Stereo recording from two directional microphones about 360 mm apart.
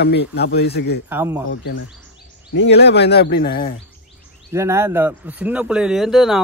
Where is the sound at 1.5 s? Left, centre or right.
Left.